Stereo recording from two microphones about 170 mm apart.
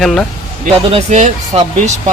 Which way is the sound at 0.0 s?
Centre (ahead or behind).